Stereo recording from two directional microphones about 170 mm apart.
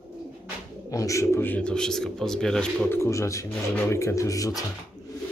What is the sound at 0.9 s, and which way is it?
Speech, 20° left (ahead or behind).